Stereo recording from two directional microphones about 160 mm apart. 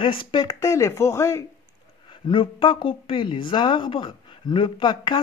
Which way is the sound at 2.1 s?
30° left (ahead or behind).